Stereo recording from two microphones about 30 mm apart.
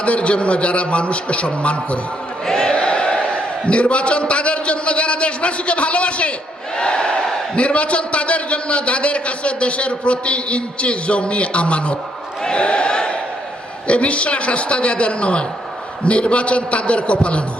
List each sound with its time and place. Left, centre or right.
0.0 s a man's voice: left
2.5 s a sound: left
2.7 s a man's voice: left
6.7 s a man's voice: left
12.5 s a sound: left
13.8 s a man's voice: left